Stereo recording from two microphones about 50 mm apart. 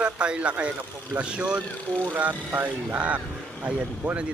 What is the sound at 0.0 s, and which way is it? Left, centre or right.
Speech, right.